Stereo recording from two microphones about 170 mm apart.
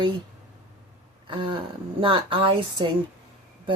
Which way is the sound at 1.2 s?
30° right (ahead or behind).